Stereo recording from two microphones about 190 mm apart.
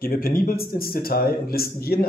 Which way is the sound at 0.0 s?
50° left (ahead or behind).